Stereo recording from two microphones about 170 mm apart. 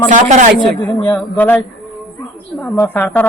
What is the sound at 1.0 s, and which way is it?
Speech, 10° left (ahead or behind).